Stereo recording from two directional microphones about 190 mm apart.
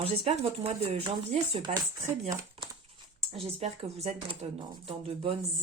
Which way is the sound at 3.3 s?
35° right (ahead or behind).